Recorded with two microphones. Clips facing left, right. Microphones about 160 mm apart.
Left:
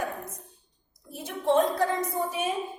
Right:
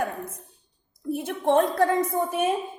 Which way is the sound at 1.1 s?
60° right (ahead or behind).